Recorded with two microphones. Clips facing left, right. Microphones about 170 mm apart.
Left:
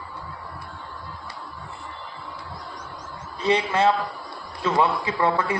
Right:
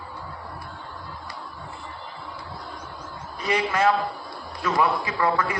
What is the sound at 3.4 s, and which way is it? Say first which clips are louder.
A man's voice: left 2 dB; 30° left (ahead or behind).